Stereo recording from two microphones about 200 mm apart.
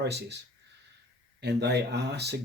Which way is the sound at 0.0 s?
55° right (ahead or behind).